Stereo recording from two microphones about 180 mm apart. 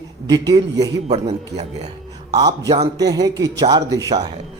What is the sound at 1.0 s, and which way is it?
Speech, 35° right (ahead or behind).